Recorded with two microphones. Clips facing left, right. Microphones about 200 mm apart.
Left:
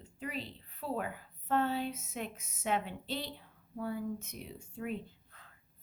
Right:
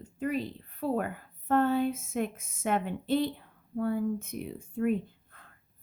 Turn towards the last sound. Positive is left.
turn(degrees=-50)  # may be behind; listen again after turning